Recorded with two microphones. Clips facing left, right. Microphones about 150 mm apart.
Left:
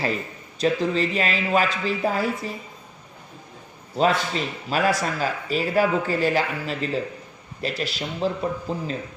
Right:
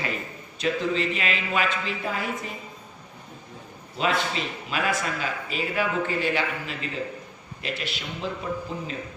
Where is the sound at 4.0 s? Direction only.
40° left (ahead or behind).